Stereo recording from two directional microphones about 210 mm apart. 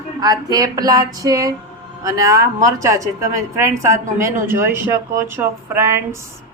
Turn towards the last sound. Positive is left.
turn(degrees=-15)  # may be behind; listen again after turning